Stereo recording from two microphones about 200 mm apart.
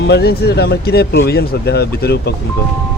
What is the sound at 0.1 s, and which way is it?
Speech, 55° left (ahead or behind).